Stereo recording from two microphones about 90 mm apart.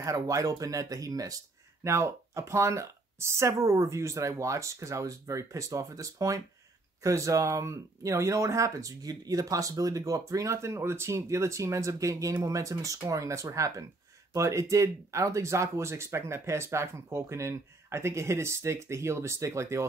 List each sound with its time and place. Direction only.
0.0 s speech: 40° right (ahead or behind)